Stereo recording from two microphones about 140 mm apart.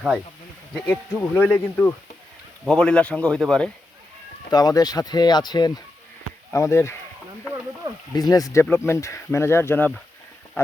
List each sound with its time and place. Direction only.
0.9 s speech: 15° left (ahead or behind)
4.5 s speech: 25° left (ahead or behind)
6.5 s speech: 20° left (ahead or behind)
8.1 s speech: 30° left (ahead or behind)